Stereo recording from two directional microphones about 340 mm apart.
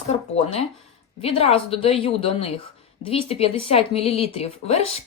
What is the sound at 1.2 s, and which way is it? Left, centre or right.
Speech, centre.